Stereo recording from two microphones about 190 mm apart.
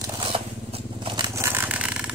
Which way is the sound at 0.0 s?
25° right (ahead or behind).